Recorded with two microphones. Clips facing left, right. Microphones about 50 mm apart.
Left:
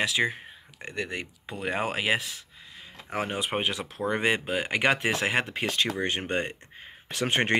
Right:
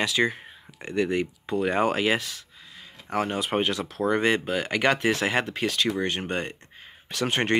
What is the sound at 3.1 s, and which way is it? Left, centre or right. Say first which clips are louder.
Speech: right 4 dB; centre.